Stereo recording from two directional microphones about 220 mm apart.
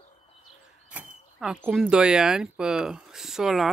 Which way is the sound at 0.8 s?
5° right (ahead or behind).